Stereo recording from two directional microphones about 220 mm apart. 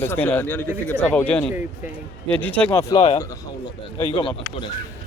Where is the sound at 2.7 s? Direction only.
25° left (ahead or behind).